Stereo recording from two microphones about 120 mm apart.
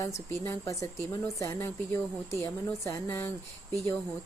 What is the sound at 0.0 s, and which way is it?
A woman's voice, 20° left (ahead or behind).